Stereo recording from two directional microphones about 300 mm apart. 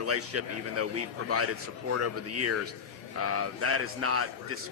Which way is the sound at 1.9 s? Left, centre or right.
Right.